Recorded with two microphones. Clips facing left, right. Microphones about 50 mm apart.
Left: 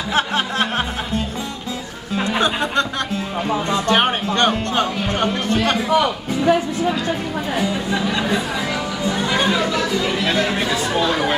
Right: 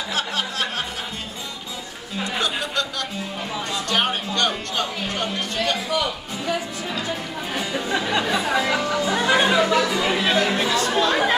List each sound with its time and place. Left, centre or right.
0.1 s music: left
2.3 s chatter: left
3.7 s speech: left
8.6 s speech: right
10.2 s speech: centre
10.5 s speech: centre